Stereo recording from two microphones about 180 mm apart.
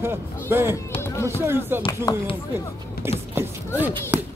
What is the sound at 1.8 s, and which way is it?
Speech, 25° left (ahead or behind).